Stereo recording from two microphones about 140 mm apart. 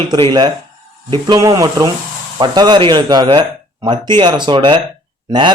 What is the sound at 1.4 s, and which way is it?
Speech, 25° right (ahead or behind).